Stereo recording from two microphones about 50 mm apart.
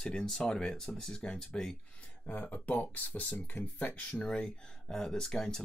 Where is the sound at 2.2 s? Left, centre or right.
Left.